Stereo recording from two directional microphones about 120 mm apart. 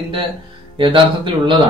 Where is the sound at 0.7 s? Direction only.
45° right (ahead or behind).